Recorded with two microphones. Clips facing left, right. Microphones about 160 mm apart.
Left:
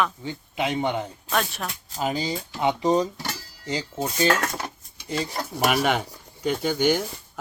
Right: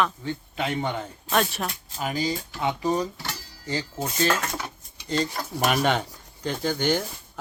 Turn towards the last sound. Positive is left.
turn(degrees=10)  # may be behind; listen again after turning